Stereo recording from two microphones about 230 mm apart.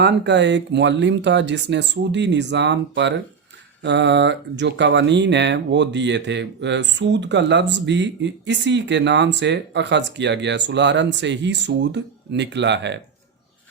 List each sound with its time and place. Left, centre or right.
0.0 s speech: right